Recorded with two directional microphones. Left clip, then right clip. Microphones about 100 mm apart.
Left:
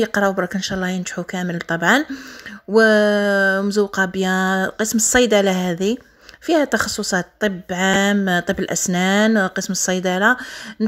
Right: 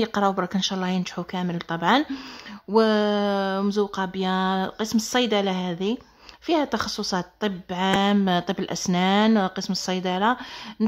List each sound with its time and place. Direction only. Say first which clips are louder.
0.0 s a woman's voice: left 5 dB; 20° left (ahead or behind); by 5.9 s 35° left (ahead or behind)
6.4 s a woman's voice: left 6 dB; 25° left (ahead or behind)